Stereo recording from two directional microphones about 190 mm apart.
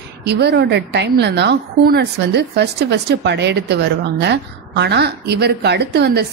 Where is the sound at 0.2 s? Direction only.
60° right (ahead or behind).